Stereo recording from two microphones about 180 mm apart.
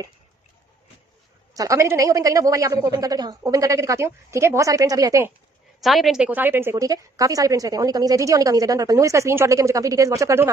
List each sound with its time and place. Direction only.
1.5 s a woman's voice: 20° right (ahead or behind)
5.8 s a woman's voice: centre (ahead or behind); by 10.5 s 15° right (ahead or behind)